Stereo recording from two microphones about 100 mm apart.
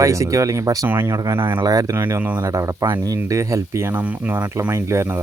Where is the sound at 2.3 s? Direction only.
35° right (ahead or behind).